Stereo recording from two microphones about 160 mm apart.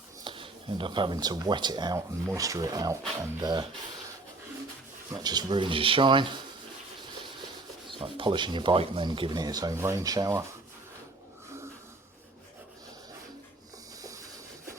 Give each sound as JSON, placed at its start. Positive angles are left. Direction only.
{"t": 0.3, "sound": "speech", "side_deg": -30}
{"t": 5.1, "sound": "speech", "side_deg": -25}
{"t": 7.9, "sound": "speech", "side_deg": -30}
{"t": 14.0, "sound": "train", "side_deg": -20}